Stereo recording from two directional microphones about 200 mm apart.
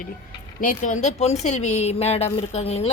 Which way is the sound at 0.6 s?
40° left (ahead or behind).